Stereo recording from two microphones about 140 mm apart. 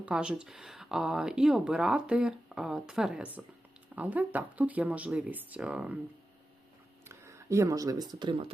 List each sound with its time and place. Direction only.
0.0 s speech: 5° right (ahead or behind)
7.1 s speech: 20° right (ahead or behind); by 8.5 s 40° right (ahead or behind)